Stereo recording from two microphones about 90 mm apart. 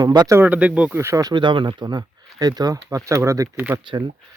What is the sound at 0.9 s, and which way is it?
Speech, 30° right (ahead or behind).